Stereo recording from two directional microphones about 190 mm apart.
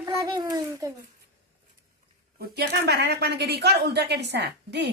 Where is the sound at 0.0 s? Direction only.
15° right (ahead or behind).